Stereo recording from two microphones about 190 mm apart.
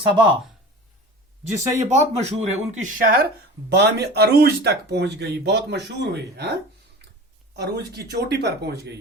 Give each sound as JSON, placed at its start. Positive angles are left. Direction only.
{"t": 0.0, "sound": "speech", "side_deg": -25}
{"t": 1.8, "sound": "speech", "side_deg": -35}